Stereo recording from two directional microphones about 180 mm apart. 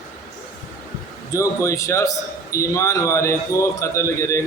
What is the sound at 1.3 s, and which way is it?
A man's voice, 15° left (ahead or behind).